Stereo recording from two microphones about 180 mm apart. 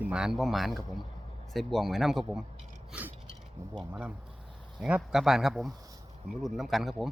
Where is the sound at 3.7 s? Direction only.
5° right (ahead or behind).